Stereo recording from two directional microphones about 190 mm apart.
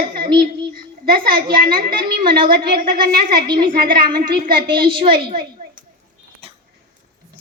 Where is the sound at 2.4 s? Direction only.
50° right (ahead or behind).